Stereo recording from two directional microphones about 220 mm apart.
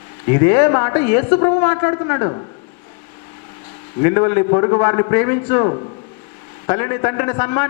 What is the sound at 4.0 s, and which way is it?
A man's voice, 15° left (ahead or behind).